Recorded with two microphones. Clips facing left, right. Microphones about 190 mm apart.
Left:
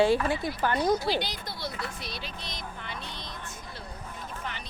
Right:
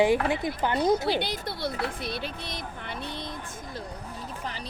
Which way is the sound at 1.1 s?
60° right (ahead or behind).